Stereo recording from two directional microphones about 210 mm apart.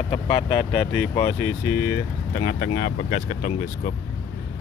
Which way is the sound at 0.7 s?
5° left (ahead or behind).